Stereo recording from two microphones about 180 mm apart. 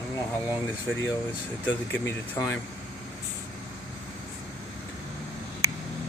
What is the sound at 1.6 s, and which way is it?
Speech, 10° left (ahead or behind).